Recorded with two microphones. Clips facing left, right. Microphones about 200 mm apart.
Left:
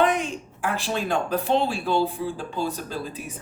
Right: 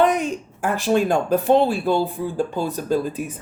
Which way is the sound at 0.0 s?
45° right (ahead or behind).